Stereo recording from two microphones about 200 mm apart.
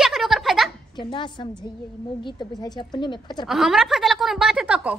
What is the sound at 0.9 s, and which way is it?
A woman's voice, 25° left (ahead or behind).